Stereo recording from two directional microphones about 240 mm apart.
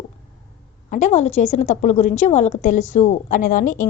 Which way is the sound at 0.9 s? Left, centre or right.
Left.